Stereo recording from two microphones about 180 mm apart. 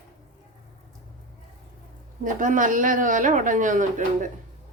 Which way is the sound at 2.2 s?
45° right (ahead or behind).